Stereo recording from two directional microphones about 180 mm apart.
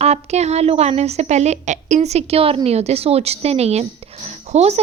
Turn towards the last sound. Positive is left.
turn(degrees=-35)  # may be behind; listen again after turning